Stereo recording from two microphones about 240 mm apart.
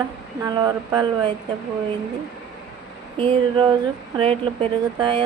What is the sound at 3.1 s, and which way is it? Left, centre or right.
Speech, right.